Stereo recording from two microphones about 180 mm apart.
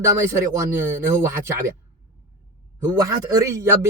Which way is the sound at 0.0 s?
15° right (ahead or behind).